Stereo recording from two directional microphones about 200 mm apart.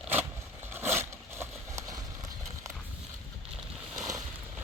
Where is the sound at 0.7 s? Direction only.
10° right (ahead or behind).